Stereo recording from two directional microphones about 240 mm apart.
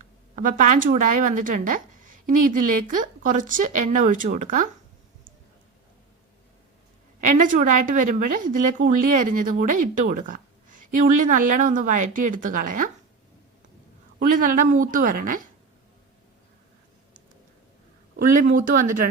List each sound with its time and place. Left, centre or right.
0.3 s a woman's voice: right
7.2 s a woman's voice: right
14.2 s a woman's voice: right
18.2 s a woman's voice: right